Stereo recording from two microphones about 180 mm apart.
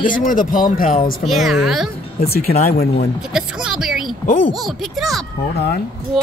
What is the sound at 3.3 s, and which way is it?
Music, 5° right (ahead or behind).